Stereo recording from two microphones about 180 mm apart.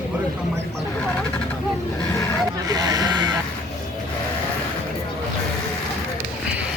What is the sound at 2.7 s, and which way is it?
Speech, 20° right (ahead or behind).